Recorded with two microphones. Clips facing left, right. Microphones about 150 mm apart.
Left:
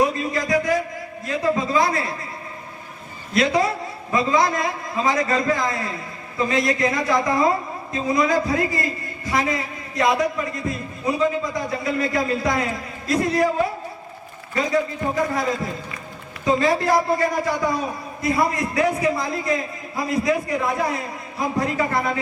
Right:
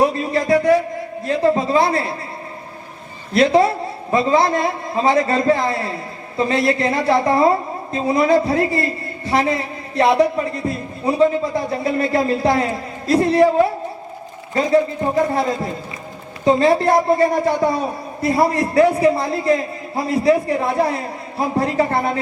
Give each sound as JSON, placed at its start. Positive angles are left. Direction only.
{"t": 0.0, "sound": "a sound", "side_deg": -30}
{"t": 1.2, "sound": "a man's voice", "side_deg": -30}
{"t": 3.3, "sound": "a man's voice", "side_deg": -30}
{"t": 14.5, "sound": "a man's voice", "side_deg": -30}